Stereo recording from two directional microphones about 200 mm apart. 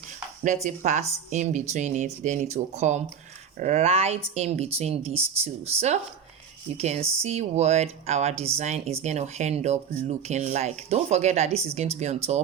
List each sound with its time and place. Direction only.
0.4 s speech: 35° right (ahead or behind)